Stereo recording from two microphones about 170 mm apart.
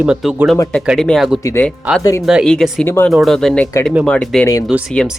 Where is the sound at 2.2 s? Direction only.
Centre (ahead or behind).